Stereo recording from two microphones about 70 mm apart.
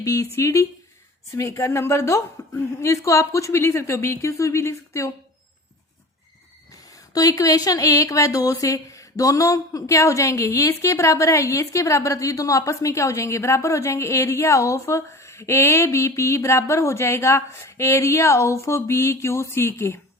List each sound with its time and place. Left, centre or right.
0.0 s speech: left
7.1 s speech: left